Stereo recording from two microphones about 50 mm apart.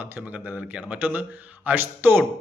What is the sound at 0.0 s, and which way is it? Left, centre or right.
Speech, right.